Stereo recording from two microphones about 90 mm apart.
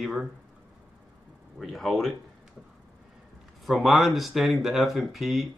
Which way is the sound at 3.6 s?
Centre (ahead or behind).